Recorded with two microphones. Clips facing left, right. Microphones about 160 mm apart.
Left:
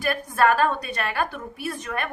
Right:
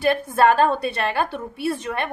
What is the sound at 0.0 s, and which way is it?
A woman's voice, 30° right (ahead or behind).